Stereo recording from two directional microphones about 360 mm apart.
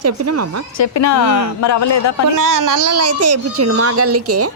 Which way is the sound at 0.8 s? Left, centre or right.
Left.